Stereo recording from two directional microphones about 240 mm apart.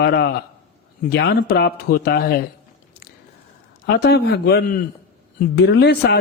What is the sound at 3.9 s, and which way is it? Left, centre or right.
Speech, left.